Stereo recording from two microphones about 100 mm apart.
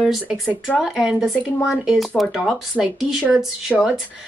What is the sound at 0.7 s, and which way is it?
Speech, centre (ahead or behind).